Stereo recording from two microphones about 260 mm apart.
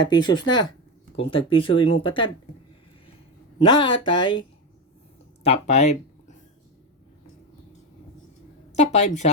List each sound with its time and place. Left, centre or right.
0.1 s speech: centre
3.6 s speech: centre
8.7 s a woman's voice: left